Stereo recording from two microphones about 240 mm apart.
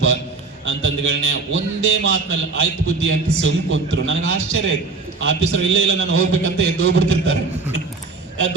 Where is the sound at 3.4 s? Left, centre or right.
Right.